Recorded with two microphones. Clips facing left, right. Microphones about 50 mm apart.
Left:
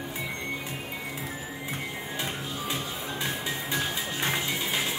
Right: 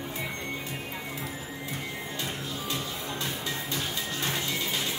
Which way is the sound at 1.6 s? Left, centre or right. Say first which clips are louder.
Left 1 dB; centre.